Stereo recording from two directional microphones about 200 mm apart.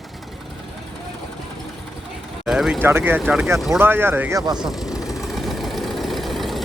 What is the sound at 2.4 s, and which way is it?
Speech, centre (ahead or behind).